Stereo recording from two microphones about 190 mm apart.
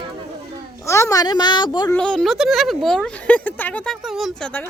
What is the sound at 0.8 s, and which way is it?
A woman's voice, 15° left (ahead or behind).